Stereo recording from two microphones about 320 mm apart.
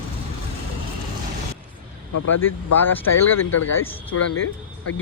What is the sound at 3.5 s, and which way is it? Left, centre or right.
Speech, left.